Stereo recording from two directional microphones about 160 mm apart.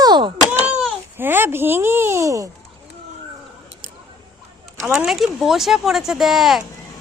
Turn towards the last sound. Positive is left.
turn(degrees=0)  # may be behind; listen again after turning